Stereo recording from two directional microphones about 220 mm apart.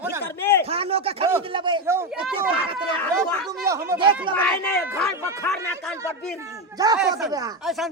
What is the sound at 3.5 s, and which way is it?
Speech, 15° right (ahead or behind).